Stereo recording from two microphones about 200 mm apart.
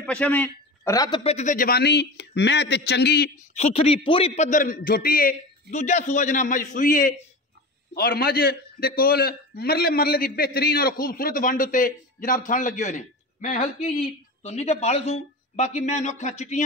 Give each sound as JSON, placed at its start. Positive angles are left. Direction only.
{"t": 0.0, "sound": "a man's voice", "side_deg": 5}
{"t": 3.5, "sound": "a man's voice", "side_deg": 30}